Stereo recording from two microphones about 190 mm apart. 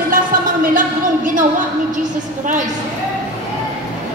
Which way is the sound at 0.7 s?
45° right (ahead or behind).